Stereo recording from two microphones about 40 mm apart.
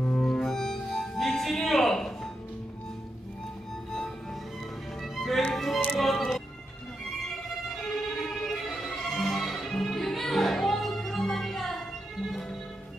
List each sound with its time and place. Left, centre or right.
0.0 s music: left
5.1 s music: centre
7.8 s music: centre